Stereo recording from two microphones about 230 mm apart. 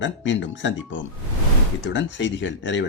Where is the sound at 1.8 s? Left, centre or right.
Left.